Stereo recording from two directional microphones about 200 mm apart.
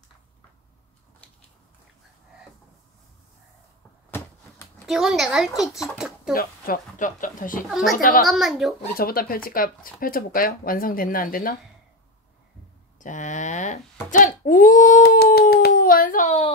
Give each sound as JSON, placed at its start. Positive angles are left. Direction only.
{"t": 4.1, "sound": "a sound", "side_deg": 10}
{"t": 4.8, "sound": "a woman's voice", "side_deg": 0}
{"t": 6.3, "sound": "speech", "side_deg": 45}
{"t": 7.6, "sound": "a woman's voice", "side_deg": 0}
{"t": 7.9, "sound": "speech", "side_deg": 45}
{"t": 8.3, "sound": "a woman's voice", "side_deg": 0}
{"t": 8.9, "sound": "speech", "side_deg": 45}
{"t": 13.0, "sound": "a sound", "side_deg": 40}